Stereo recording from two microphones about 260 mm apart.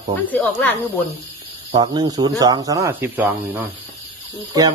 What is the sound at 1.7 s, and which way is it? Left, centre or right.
Speech, centre.